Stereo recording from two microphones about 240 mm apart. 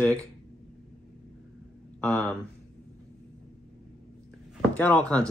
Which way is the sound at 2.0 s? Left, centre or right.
Centre.